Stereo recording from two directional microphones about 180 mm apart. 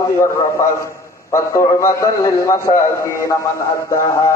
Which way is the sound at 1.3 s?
15° left (ahead or behind).